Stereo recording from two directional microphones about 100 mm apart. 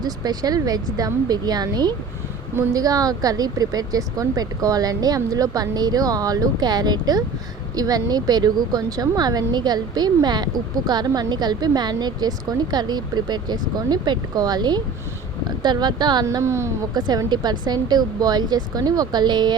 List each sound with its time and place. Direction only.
0.0 s a woman's voice: 40° right (ahead or behind)
16.2 s speech: 30° right (ahead or behind)
16.9 s a woman's voice: 45° right (ahead or behind)